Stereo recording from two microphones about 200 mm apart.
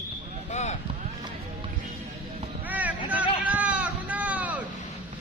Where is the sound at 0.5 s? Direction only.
35° left (ahead or behind).